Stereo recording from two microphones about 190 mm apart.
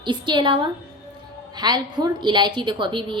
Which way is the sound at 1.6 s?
20° right (ahead or behind).